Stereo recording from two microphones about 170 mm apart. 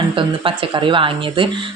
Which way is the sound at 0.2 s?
30° right (ahead or behind).